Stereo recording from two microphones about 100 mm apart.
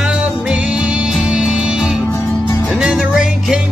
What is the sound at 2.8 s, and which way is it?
Music, 5° right (ahead or behind).